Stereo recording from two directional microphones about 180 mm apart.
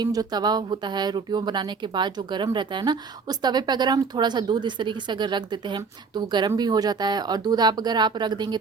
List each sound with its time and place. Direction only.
0.0 s speech: 20° right (ahead or behind)